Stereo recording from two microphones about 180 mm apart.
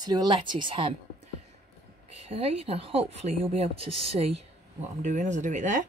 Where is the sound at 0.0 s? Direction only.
25° right (ahead or behind).